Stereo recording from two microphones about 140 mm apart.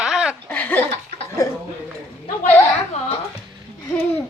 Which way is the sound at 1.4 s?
25° left (ahead or behind).